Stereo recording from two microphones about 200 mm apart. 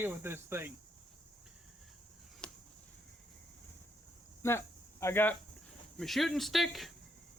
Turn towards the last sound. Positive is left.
turn(degrees=0)  # may be behind; listen again after turning